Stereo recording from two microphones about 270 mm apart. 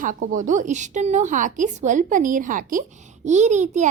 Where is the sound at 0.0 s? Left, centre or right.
Right.